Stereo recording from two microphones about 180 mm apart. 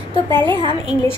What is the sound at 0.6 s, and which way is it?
Speech, 25° left (ahead or behind).